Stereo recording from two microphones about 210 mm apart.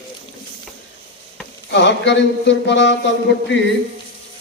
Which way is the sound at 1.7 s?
60° left (ahead or behind).